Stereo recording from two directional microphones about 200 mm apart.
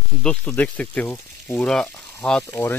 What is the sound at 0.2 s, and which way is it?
Speech, 5° left (ahead or behind).